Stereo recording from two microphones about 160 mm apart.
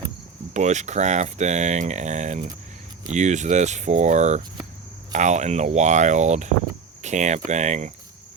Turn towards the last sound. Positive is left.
turn(degrees=-50)  # may be behind; listen again after turning